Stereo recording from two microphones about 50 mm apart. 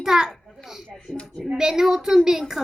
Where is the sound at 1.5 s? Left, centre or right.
Centre.